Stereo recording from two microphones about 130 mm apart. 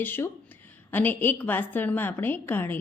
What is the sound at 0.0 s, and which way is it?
A woman's voice, 15° left (ahead or behind).